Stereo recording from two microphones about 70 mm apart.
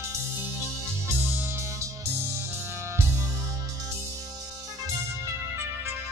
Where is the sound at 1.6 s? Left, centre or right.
Right.